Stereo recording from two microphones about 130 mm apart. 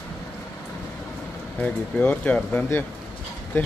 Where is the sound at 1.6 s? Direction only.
10° left (ahead or behind).